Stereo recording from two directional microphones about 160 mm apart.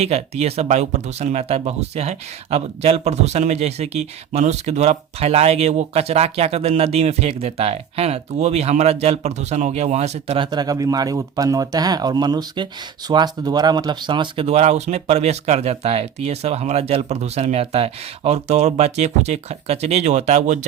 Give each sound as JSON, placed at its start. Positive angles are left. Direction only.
{"t": 0.0, "sound": "speech", "side_deg": -40}